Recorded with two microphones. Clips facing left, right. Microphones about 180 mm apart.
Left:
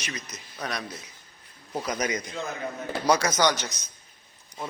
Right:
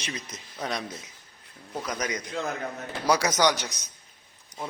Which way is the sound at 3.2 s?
15° right (ahead or behind).